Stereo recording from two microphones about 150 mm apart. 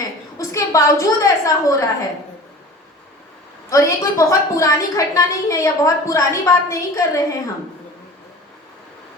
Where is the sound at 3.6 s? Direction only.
20° left (ahead or behind).